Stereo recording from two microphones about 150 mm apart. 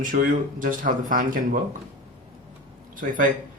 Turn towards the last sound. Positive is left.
turn(degrees=-60)  # may be behind; listen again after turning